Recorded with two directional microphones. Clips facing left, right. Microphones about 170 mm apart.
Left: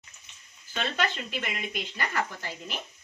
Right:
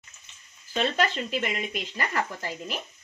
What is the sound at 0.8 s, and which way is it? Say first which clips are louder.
Speech: right 4 dB; 35° right (ahead or behind).